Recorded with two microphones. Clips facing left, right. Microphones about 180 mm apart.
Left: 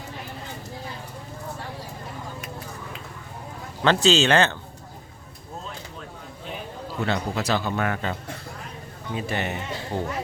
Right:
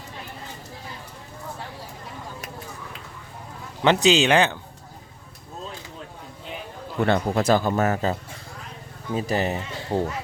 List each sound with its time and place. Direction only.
3.8 s a man's voice: 15° right (ahead or behind)
7.0 s a man's voice: 50° right (ahead or behind)
9.1 s speech: 35° right (ahead or behind)